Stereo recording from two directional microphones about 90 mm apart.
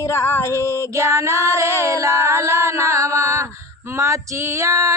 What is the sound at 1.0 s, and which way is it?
Female singing, 35° right (ahead or behind).